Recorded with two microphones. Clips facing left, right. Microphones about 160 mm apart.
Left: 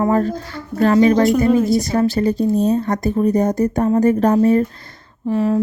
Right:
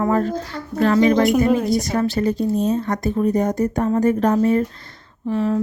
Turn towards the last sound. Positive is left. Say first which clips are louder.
# left 3 dB
turn(degrees=40)  # may be behind; listen again after turning